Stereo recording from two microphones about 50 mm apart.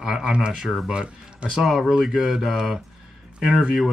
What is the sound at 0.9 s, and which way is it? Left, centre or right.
Speech, centre.